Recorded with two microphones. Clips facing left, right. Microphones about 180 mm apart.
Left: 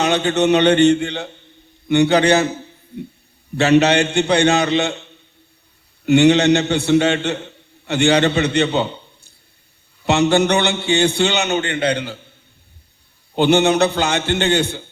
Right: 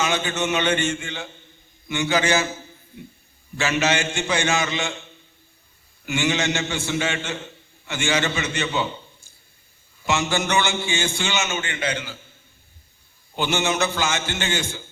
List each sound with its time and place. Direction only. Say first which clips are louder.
0.0 s a man's voice: left 8 dB; 65° left (ahead or behind)
3.6 s a man's voice: left 9 dB; 65° left (ahead or behind)
6.1 s a man's voice: left 12 dB; 65° left (ahead or behind)
13.3 s a man's voice: left 9 dB; 60° left (ahead or behind)